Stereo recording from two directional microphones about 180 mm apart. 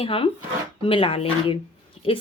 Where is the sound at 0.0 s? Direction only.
30° left (ahead or behind).